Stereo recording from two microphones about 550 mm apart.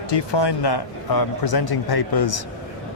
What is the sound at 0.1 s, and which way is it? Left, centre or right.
A man's voice, left.